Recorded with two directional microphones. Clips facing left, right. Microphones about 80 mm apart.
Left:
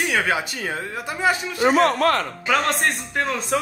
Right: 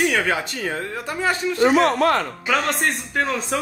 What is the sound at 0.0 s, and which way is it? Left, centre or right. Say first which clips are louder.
Speech: right 1 dB; centre.